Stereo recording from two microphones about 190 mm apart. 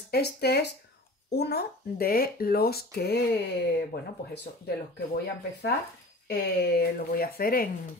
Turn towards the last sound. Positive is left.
turn(degrees=50)  # may be behind; listen again after turning